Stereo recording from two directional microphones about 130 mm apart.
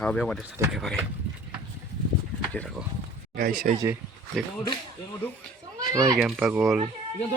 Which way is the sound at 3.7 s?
70° right (ahead or behind).